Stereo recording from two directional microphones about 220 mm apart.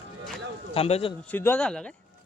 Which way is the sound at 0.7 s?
25° left (ahead or behind).